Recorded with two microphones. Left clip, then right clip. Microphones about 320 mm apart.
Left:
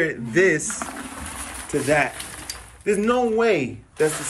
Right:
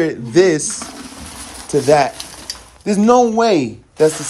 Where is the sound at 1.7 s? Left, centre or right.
Right.